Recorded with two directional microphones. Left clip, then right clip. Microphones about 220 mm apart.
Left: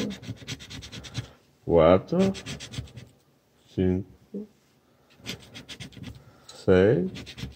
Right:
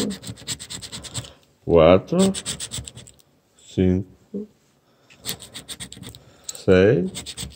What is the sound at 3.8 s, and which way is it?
Speech, 25° right (ahead or behind).